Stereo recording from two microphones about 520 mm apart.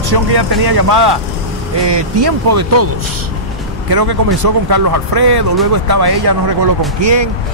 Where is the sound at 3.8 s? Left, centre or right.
Right.